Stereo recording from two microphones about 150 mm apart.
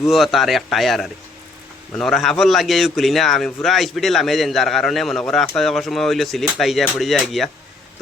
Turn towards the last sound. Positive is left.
turn(degrees=0)  # may be behind; listen again after turning